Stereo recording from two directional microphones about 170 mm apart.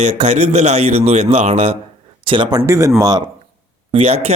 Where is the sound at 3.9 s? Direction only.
35° right (ahead or behind).